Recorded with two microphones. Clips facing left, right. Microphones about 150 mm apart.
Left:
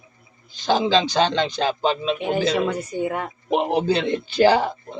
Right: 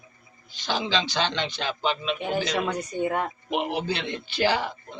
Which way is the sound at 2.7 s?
5° left (ahead or behind).